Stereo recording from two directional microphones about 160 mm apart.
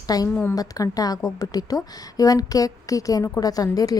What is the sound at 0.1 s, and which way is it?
A woman's voice, 25° left (ahead or behind).